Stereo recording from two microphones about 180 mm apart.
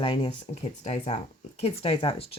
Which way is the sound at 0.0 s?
30° left (ahead or behind).